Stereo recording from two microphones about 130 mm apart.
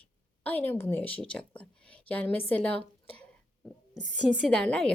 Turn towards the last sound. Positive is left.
turn(degrees=5)  # may be behind; listen again after turning